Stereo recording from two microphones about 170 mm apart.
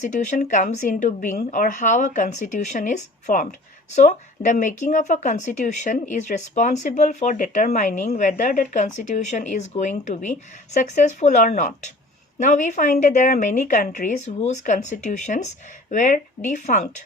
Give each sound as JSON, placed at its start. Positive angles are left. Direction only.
{"t": 0.0, "sound": "a woman's voice", "side_deg": 45}